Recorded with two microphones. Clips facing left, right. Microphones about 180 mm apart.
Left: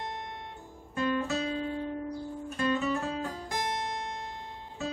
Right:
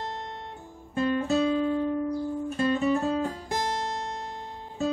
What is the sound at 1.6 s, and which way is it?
Music, 40° right (ahead or behind).